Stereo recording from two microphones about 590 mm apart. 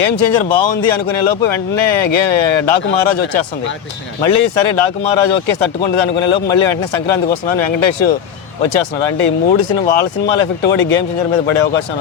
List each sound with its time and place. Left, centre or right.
0.0 s speech: left